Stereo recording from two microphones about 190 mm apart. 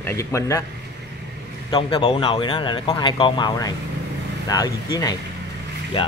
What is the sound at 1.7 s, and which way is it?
Speech, 25° left (ahead or behind).